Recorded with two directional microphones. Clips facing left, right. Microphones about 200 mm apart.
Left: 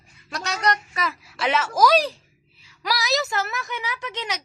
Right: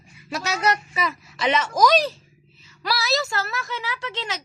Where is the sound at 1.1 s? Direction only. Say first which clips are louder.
Right 1 dB; 10° left (ahead or behind).